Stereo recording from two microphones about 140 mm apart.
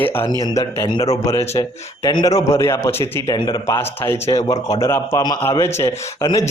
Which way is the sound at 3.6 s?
20° left (ahead or behind).